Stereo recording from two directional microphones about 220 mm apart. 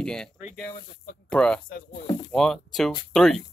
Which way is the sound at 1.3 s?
5° left (ahead or behind).